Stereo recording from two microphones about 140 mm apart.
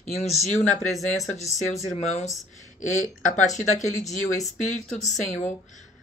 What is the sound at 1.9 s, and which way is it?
Speech, 50° left (ahead or behind).